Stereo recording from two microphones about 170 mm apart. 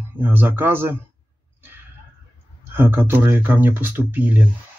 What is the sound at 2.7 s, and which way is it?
Speech, 15° right (ahead or behind).